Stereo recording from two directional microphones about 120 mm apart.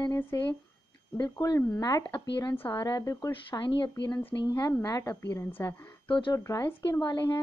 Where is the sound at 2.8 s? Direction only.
30° left (ahead or behind).